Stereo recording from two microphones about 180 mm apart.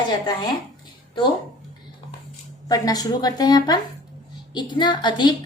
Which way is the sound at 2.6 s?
20° left (ahead or behind).